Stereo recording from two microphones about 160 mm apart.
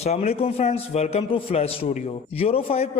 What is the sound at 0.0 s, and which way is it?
A man's voice, 40° left (ahead or behind).